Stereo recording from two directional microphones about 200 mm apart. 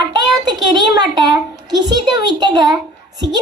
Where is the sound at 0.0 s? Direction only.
20° right (ahead or behind).